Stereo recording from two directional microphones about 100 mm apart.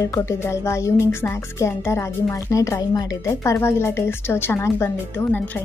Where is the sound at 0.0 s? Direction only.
30° left (ahead or behind).